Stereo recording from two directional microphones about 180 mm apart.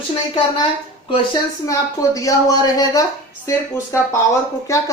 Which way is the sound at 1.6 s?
20° left (ahead or behind).